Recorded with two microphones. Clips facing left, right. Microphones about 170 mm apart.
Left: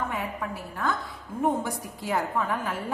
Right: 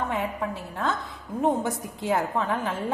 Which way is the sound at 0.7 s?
20° right (ahead or behind).